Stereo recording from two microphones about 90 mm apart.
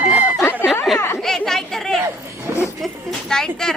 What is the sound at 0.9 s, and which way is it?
Speech, 30° left (ahead or behind).